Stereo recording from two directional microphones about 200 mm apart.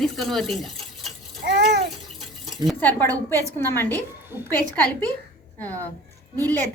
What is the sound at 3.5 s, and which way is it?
Speech, 10° left (ahead or behind).